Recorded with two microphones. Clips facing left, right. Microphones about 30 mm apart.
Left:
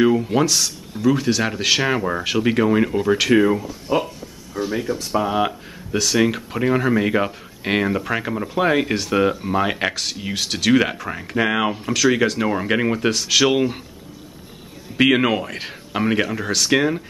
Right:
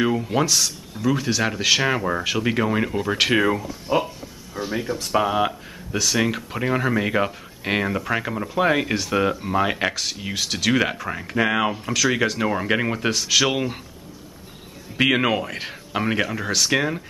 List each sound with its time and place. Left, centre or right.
0.0 s speech: centre
3.2 s speech: right
3.6 s speech: centre
4.9 s speech: right
5.3 s speech: centre
15.0 s speech: centre